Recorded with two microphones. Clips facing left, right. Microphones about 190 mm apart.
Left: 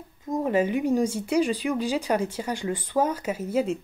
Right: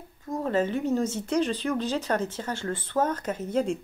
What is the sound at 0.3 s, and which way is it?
Speech, 15° left (ahead or behind).